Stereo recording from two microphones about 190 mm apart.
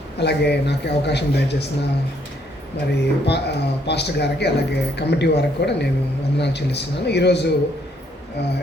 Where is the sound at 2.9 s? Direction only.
60° left (ahead or behind).